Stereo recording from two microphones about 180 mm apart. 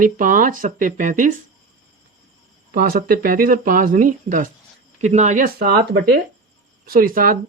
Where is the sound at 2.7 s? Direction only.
55° right (ahead or behind).